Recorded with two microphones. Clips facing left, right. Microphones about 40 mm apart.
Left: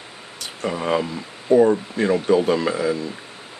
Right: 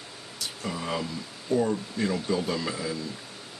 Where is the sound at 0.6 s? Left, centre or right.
Left.